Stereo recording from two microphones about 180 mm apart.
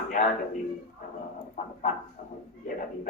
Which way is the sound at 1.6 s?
45° left (ahead or behind).